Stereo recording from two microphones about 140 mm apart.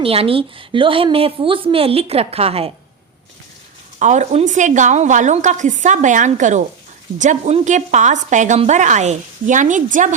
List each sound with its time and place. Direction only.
0.0 s a woman's voice: 40° right (ahead or behind)
4.0 s a woman's voice: 60° right (ahead or behind)